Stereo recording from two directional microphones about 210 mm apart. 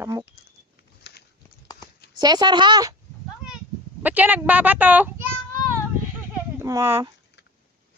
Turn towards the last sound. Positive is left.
turn(degrees=-15)  # may be behind; listen again after turning